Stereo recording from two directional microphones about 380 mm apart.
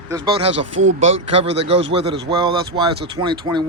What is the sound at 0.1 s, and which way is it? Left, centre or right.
Speech, centre.